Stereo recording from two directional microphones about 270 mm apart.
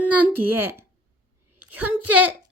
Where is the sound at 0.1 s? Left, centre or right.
Centre.